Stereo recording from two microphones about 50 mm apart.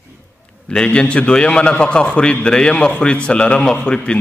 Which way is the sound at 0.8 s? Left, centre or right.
Left.